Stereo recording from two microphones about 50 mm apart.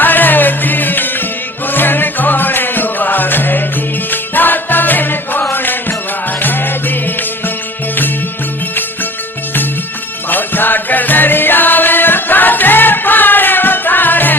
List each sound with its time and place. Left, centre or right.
0.0 s music: left
10.2 s music: left